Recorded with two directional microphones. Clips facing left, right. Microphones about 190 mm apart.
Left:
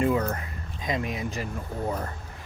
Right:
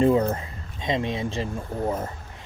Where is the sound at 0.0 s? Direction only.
30° right (ahead or behind).